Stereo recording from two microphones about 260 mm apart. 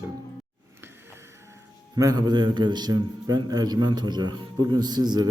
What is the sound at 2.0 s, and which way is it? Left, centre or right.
A man's voice, centre.